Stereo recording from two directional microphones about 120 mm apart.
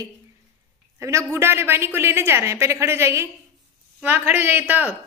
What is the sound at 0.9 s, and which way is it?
A woman's voice, 25° right (ahead or behind).